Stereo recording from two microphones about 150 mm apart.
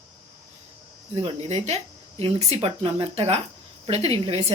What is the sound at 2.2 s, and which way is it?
Speech, 45° right (ahead or behind).